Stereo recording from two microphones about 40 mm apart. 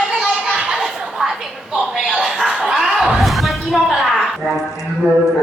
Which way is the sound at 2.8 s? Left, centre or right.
Centre.